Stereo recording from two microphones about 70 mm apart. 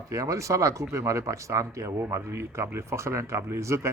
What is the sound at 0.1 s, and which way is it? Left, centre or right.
Speech, right.